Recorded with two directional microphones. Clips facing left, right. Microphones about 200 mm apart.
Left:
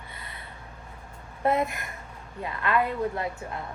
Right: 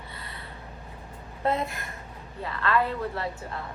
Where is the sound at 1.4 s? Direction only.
20° left (ahead or behind).